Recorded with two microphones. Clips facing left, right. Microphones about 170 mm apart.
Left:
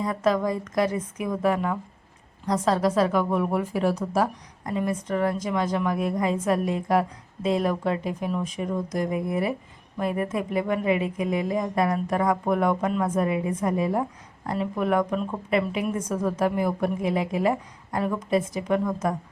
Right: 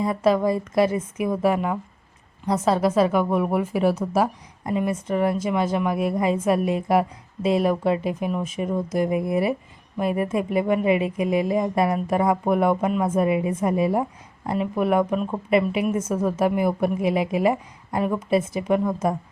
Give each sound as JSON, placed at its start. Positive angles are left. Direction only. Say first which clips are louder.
{"t": 0.0, "sound": "a woman's voice", "louder": "right 4 dB", "side_deg": -10}